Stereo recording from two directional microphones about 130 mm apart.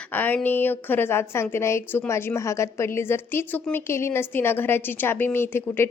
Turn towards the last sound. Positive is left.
turn(degrees=15)  # may be behind; listen again after turning